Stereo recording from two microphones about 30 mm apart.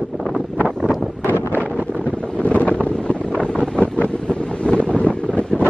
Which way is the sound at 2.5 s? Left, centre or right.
Left.